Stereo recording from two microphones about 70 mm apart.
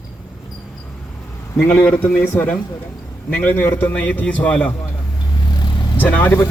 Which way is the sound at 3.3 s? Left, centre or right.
Left.